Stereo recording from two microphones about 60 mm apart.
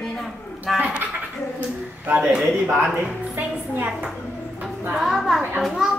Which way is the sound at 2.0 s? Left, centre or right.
Right.